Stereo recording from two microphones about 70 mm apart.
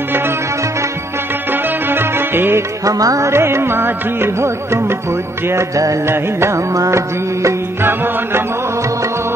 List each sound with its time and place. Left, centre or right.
1.5 s music: right
2.8 s music: right
3.3 s music of bollywood: right
5.5 s music: right
6.0 s music of bollywood: right
6.7 s music: right
7.8 s music of bollywood: right